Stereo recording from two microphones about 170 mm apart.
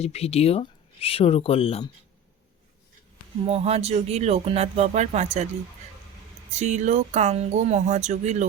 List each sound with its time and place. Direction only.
0.0 s speech: 35° left (ahead or behind)
3.4 s speech: 35° right (ahead or behind)
6.5 s speech: 45° right (ahead or behind)